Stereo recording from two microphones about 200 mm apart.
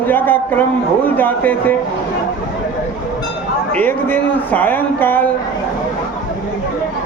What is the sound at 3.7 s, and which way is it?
Speech, 10° left (ahead or behind).